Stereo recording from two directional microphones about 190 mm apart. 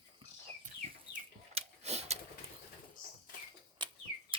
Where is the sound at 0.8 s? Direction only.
35° right (ahead or behind).